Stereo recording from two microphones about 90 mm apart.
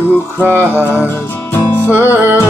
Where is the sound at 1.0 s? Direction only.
30° left (ahead or behind).